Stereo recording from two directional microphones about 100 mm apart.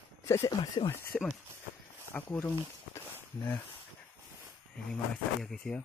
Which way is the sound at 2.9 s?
25° left (ahead or behind).